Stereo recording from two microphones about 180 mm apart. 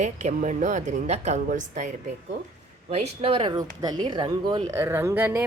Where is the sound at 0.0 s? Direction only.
40° right (ahead or behind).